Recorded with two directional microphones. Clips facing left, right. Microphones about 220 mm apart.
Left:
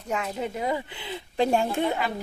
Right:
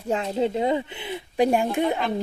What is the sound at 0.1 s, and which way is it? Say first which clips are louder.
Speech: right 6 dB; 30° right (ahead or behind).